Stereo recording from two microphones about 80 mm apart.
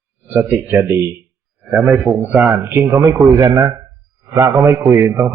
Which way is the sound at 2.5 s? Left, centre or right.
Right.